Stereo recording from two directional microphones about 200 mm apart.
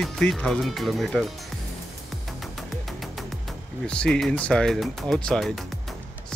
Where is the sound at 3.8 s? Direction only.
5° left (ahead or behind).